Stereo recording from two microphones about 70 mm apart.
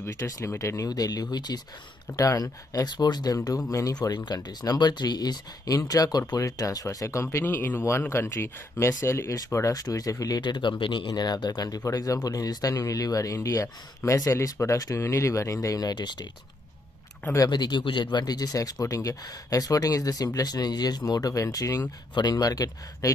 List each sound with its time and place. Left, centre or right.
0.0 s speech: left
0.6 s speech: left
2.1 s speech: left
3.4 s speech: left
5.8 s speech: left
7.2 s speech: left
9.3 s speech: left
15.8 s speech: left
17.5 s speech: left
20.3 s speech: left
22.1 s speech: left